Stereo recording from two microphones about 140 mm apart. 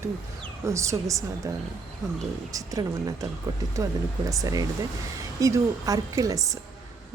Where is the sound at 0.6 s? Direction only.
20° right (ahead or behind).